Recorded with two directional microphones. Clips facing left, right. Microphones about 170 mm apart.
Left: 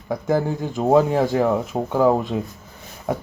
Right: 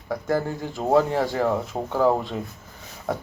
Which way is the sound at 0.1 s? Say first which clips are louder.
Left 4 dB; 20° left (ahead or behind).